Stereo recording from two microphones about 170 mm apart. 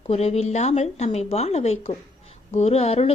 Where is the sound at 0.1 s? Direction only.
40° left (ahead or behind).